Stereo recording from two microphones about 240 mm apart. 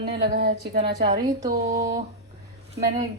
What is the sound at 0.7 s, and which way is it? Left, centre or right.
Speech, right.